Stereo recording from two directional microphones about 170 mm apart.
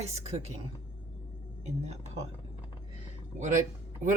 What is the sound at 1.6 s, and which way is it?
Speech, 40° right (ahead or behind).